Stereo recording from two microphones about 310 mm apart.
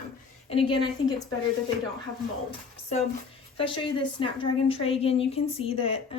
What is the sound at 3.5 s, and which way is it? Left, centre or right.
Speech, centre.